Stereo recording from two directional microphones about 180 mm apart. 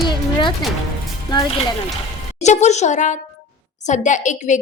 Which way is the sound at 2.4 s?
40° left (ahead or behind).